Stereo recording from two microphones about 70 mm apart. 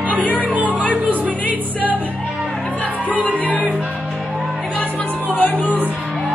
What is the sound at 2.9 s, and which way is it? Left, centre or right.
Music, right.